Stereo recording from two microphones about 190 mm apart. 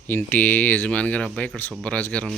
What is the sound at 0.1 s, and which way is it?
Speech, 10° left (ahead or behind).